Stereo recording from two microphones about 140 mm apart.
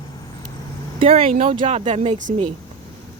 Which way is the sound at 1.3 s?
65° right (ahead or behind).